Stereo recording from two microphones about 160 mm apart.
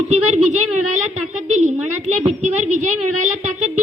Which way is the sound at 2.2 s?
40° right (ahead or behind).